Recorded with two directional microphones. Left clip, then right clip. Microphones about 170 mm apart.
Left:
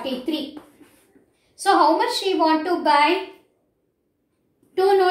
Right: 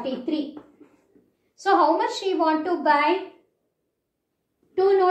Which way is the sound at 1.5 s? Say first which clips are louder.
Left 2 dB; 15° left (ahead or behind).